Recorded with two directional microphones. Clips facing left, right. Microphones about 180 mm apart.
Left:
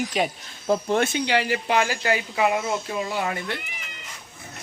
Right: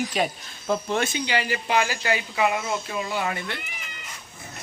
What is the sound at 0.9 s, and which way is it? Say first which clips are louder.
Speech: left 3 dB; 55° left (ahead or behind).